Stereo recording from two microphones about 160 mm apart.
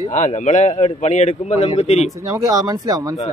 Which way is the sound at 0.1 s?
50° left (ahead or behind).